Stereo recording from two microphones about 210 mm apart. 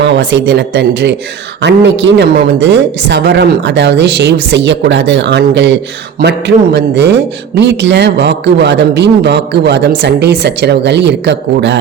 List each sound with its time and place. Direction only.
0.0 s speech: 55° right (ahead or behind)